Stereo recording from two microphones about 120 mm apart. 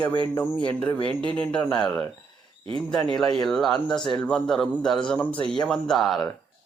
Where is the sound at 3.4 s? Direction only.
5° left (ahead or behind).